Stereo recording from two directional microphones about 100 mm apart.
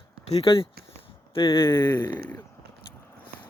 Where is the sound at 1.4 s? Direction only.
55° left (ahead or behind).